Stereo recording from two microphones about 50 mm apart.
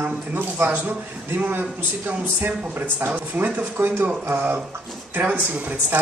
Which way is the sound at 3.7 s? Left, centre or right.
Right.